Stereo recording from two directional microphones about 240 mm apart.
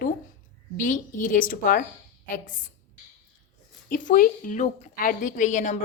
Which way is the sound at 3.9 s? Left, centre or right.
Left.